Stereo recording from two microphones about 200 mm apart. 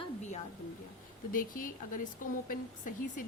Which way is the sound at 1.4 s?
45° left (ahead or behind).